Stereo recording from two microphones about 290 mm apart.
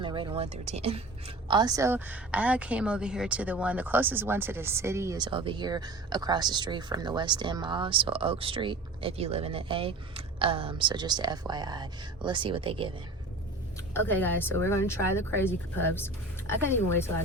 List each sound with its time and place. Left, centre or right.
0.0 s a woman's voice: centre
13.9 s speech: centre